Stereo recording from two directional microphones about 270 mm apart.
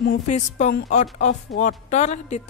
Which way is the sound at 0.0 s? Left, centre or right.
Left.